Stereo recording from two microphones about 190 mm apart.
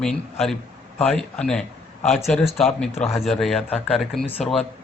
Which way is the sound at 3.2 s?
Centre (ahead or behind).